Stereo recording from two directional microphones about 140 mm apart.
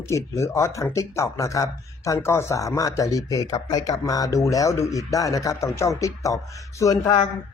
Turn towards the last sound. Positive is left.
turn(degrees=25)  # may be behind; listen again after turning